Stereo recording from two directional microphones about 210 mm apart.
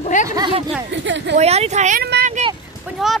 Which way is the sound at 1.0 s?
60° right (ahead or behind).